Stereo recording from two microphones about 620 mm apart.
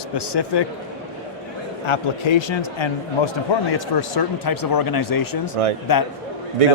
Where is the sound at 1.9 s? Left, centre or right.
Left.